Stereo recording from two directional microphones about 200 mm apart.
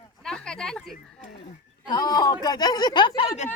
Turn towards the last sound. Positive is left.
turn(degrees=25)  # may be behind; listen again after turning